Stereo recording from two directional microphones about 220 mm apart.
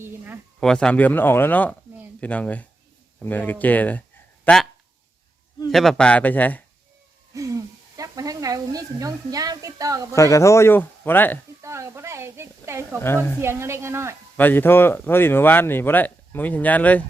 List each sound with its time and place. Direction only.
0.6 s speech: 5° left (ahead or behind)
5.7 s speech: centre (ahead or behind)
7.3 s speech: 15° right (ahead or behind)
10.2 s speech: 15° left (ahead or behind)
11.6 s speech: 15° right (ahead or behind)
14.3 s speech: 10° left (ahead or behind)